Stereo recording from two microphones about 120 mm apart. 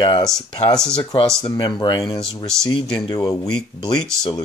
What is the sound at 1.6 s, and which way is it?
Speech, 35° left (ahead or behind).